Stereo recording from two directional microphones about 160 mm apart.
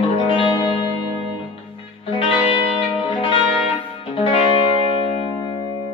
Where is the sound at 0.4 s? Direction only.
30° left (ahead or behind).